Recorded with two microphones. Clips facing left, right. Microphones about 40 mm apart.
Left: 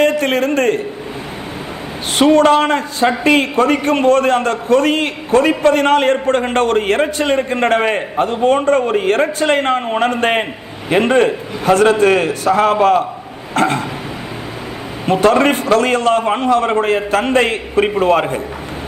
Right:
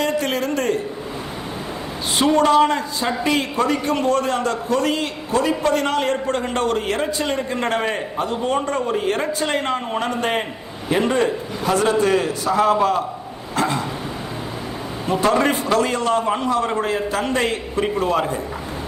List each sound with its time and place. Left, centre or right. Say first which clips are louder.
0.0 s a man's voice: left 7 dB; left
2.1 s a man's voice: left 5 dB; left
15.0 s a man's voice: left 6 dB; left